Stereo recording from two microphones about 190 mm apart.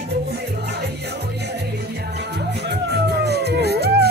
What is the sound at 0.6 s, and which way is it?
Music, 60° right (ahead or behind).